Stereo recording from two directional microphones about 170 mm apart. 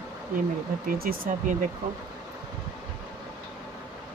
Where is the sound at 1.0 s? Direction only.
60° right (ahead or behind).